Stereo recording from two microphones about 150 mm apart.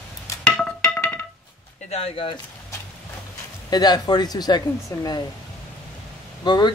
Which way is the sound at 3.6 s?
25° left (ahead or behind).